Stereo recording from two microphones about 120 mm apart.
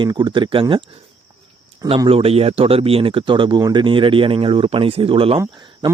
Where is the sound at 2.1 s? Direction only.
55° right (ahead or behind).